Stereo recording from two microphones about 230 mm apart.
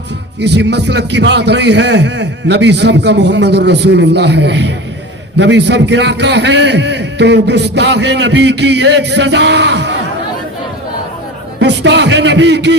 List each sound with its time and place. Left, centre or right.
0.3 s a man's voice: right
11.6 s a man's voice: right